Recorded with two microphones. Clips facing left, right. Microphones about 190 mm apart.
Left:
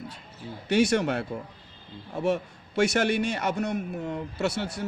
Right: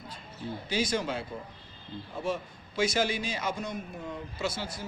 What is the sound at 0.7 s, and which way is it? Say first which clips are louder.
A man's voice: left 8 dB; 70° left (ahead or behind).